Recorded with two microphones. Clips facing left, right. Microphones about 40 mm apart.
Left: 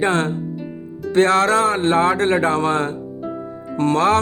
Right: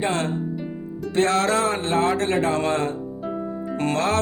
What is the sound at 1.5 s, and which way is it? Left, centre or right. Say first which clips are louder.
Speech: left 5 dB; left.